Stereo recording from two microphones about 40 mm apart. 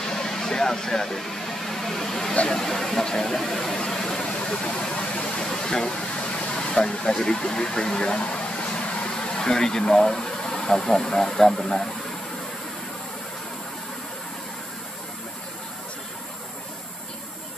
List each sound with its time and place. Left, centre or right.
0.0 s vehicle: centre
4.2 s vehicle: left
9.8 s speech: left
11.1 s vehicle: centre